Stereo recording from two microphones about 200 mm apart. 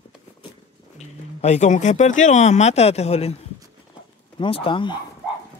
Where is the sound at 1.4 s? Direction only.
35° left (ahead or behind).